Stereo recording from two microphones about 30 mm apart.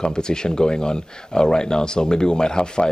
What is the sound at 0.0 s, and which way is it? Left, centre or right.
A man's voice, left.